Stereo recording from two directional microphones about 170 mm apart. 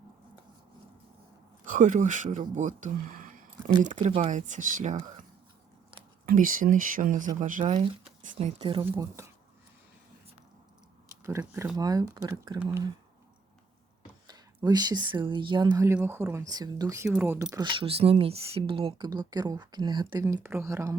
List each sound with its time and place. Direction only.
1.6 s speech: 50° right (ahead or behind)
4.0 s speech: 35° right (ahead or behind)
4.3 s speech: 45° right (ahead or behind)
6.2 s speech: 55° right (ahead or behind); by 8.8 s 35° right (ahead or behind)
8.8 s speech: 15° right (ahead or behind)
11.1 s speech: 15° right (ahead or behind)
14.3 s speech: 25° right (ahead or behind)
16.0 s speech: 10° right (ahead or behind)
17.1 s speech: 10° right (ahead or behind)
17.6 s speech: 35° right (ahead or behind); by 20.9 s 15° right (ahead or behind)